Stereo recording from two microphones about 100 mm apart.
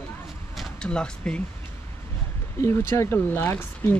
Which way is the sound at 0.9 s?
10° left (ahead or behind).